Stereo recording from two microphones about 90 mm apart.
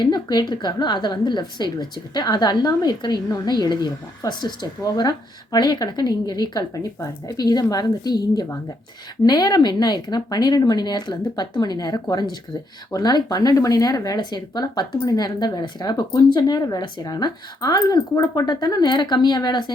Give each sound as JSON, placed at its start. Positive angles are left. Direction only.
{"t": 0.0, "sound": "speech", "side_deg": 50}